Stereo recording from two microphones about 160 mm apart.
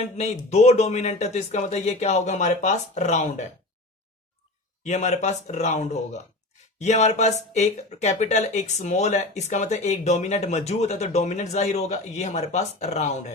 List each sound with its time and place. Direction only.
0.2 s speech: 45° left (ahead or behind)
4.8 s speech: 45° left (ahead or behind)